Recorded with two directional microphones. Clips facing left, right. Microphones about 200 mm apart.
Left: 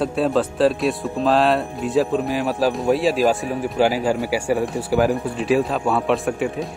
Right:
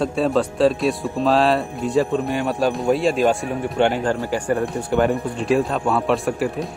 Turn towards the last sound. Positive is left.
turn(degrees=0)  # may be behind; listen again after turning